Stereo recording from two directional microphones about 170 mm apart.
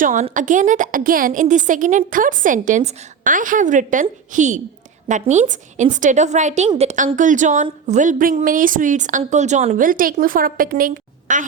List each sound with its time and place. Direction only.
0.0 s a woman's voice: 50° right (ahead or behind)